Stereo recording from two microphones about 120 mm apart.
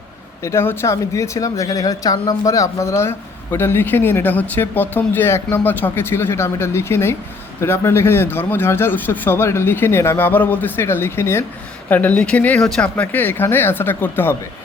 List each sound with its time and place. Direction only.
0.4 s speech: 20° left (ahead or behind)